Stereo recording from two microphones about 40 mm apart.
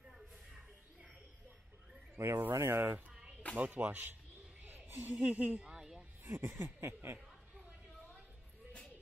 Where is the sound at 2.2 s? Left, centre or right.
Right.